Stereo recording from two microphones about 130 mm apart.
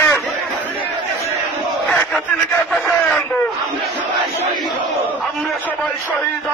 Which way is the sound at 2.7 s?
Centre (ahead or behind).